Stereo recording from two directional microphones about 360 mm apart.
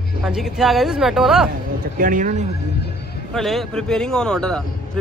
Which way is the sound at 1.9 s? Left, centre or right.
Right.